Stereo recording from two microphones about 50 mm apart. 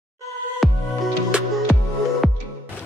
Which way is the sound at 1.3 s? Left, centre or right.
Right.